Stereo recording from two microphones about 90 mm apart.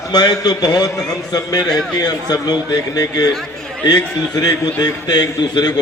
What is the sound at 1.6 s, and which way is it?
Speech, 5° left (ahead or behind).